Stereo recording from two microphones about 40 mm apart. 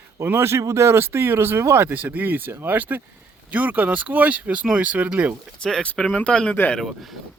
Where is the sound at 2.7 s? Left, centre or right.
Right.